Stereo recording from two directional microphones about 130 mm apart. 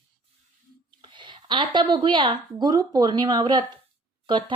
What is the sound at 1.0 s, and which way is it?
Speech, 40° right (ahead or behind).